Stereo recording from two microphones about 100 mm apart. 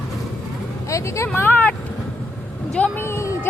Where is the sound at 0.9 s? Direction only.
30° left (ahead or behind).